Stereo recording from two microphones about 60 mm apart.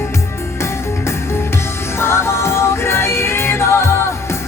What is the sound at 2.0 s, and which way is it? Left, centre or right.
Music, left.